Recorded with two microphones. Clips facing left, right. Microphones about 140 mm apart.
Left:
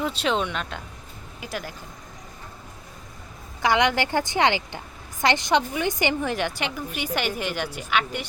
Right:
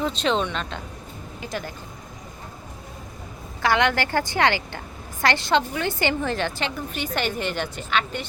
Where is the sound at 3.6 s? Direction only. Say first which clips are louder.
Even; 15° left (ahead or behind).